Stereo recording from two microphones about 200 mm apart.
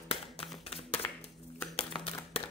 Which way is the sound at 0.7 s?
30° left (ahead or behind).